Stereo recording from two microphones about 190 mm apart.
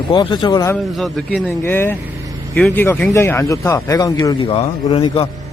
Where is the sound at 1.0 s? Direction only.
Centre (ahead or behind).